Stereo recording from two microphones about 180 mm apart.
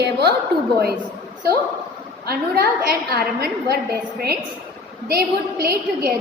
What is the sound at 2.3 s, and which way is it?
A woman's voice, 60° right (ahead or behind).